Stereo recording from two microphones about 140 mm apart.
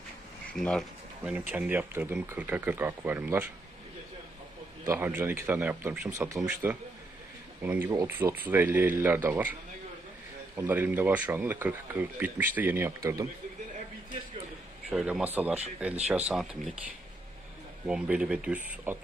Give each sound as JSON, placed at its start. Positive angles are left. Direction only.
{"t": 0.5, "sound": "speech", "side_deg": 5}
{"t": 1.2, "sound": "speech", "side_deg": -10}
{"t": 4.8, "sound": "speech", "side_deg": -15}
{"t": 14.9, "sound": "speech", "side_deg": 0}
{"t": 17.8, "sound": "speech", "side_deg": -5}